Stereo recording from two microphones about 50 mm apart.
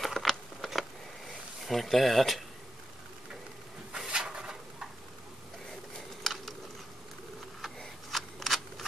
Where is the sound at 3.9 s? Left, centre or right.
Centre.